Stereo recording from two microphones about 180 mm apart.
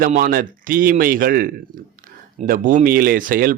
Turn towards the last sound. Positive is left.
turn(degrees=-50)  # may be behind; listen again after turning